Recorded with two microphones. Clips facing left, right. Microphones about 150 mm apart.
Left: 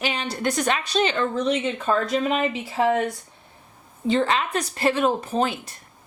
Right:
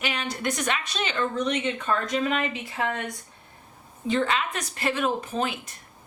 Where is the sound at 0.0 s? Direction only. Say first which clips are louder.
Left 3 dB; 30° left (ahead or behind).